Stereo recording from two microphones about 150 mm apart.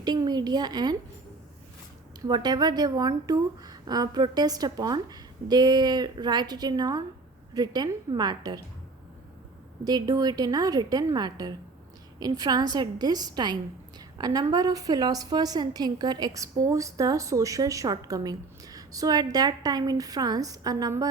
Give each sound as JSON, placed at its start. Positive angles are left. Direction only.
{"t": 0.0, "sound": "a woman's voice", "side_deg": -25}
{"t": 2.2, "sound": "a woman's voice", "side_deg": -25}
{"t": 9.8, "sound": "a woman's voice", "side_deg": -25}